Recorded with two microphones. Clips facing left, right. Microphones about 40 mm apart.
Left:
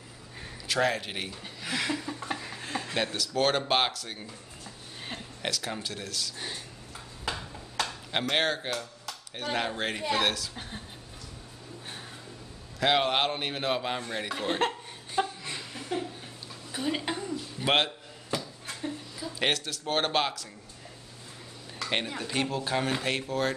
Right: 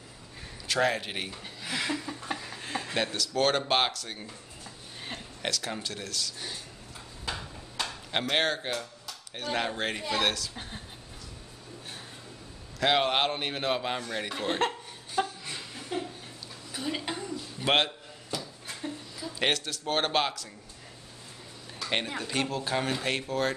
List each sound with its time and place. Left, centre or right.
0.7 s a man's voice: centre
1.6 s a sound: centre
2.2 s speech: centre
6.3 s speech: centre
7.8 s chop: centre
9.3 s a man's voice: centre
12.7 s a man's voice: centre
15.1 s laughter: centre
16.7 s a sound: centre
17.6 s a man's voice: centre
18.4 s a sound: centre
21.8 s a man's voice: centre